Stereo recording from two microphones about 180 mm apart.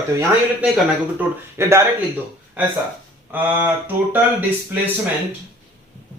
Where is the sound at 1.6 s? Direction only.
15° right (ahead or behind).